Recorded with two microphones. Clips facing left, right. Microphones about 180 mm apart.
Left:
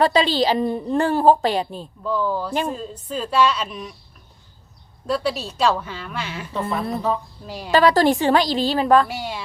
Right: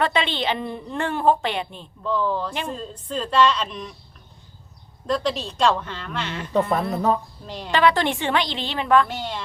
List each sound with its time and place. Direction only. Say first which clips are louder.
0.0 s a woman's voice: left 5 dB; 35° left (ahead or behind)
2.0 s a woman's voice: left 1 dB; 10° left (ahead or behind)
5.0 s a woman's voice: left 1 dB; 10° left (ahead or behind)
6.6 s speech: right 3 dB; 40° right (ahead or behind)
7.4 s a woman's voice: left 1 dB; 10° left (ahead or behind)
7.7 s a woman's voice: left 4 dB; 40° left (ahead or behind)
9.0 s a woman's voice: left 1 dB; 10° left (ahead or behind)